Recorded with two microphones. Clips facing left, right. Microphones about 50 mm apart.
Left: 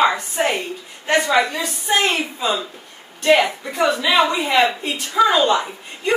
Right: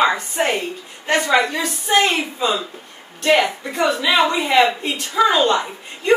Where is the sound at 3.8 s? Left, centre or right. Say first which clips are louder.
Even; centre.